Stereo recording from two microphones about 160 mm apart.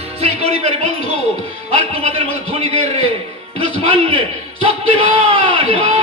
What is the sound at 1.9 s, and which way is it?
A man's voice, 35° right (ahead or behind).